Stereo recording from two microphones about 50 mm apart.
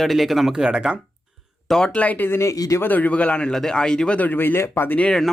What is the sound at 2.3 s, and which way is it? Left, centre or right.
Speech, left.